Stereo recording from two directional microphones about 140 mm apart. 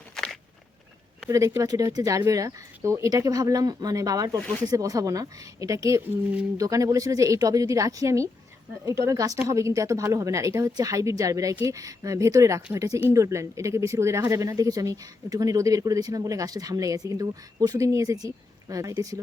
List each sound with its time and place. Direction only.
1.3 s speech: 20° right (ahead or behind)
4.4 s speech: 5° left (ahead or behind)
4.6 s speech: 25° right (ahead or behind)